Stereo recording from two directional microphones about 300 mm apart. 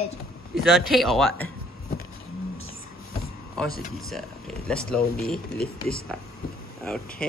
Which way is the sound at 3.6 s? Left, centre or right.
Left.